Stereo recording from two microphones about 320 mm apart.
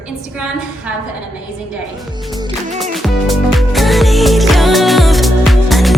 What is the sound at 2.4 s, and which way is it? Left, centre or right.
Music, centre.